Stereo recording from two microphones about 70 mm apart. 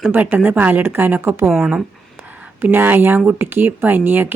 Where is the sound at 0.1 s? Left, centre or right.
Right.